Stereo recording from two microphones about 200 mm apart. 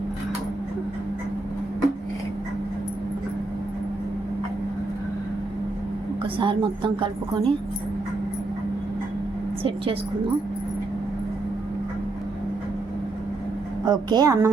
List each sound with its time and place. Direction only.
6.2 s a woman's voice: 25° right (ahead or behind)
9.6 s a woman's voice: 25° right (ahead or behind)
13.8 s a woman's voice: 20° right (ahead or behind)